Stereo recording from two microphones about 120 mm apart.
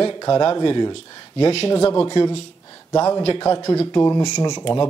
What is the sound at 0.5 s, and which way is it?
Speech, 40° left (ahead or behind).